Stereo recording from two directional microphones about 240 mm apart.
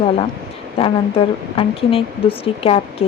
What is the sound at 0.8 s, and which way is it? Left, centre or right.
Speech, left.